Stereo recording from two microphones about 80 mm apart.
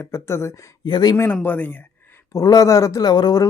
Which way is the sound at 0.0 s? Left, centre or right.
Left.